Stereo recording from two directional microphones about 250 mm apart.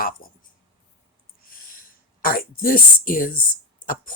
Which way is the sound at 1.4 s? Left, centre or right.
Left.